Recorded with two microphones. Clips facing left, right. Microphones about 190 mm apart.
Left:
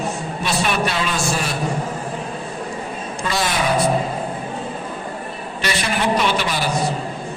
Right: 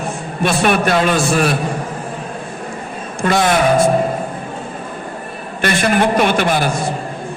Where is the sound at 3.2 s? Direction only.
55° right (ahead or behind).